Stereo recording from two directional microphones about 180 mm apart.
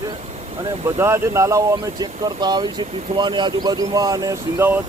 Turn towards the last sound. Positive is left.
turn(degrees=-10)  # may be behind; listen again after turning